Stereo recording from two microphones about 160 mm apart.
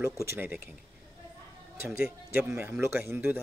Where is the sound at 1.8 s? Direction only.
15° right (ahead or behind).